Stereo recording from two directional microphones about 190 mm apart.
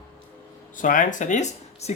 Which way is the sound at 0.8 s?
45° left (ahead or behind).